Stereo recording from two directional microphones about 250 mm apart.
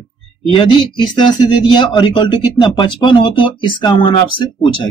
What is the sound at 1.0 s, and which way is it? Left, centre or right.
Speech, centre.